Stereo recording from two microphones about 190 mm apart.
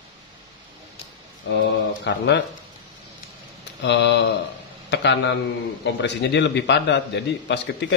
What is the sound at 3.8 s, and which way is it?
Speech, 65° left (ahead or behind).